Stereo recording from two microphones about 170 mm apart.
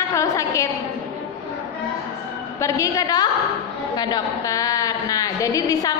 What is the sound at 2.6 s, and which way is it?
A woman's voice, 20° left (ahead or behind).